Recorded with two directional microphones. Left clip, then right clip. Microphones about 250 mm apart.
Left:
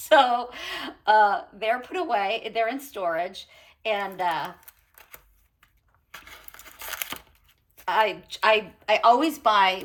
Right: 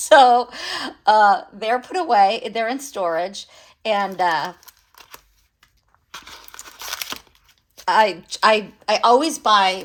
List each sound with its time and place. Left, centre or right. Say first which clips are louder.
0.0 s speech: right 7 dB; right
6.1 s crumpling: right 6 dB; centre
7.8 s speech: right 7 dB; right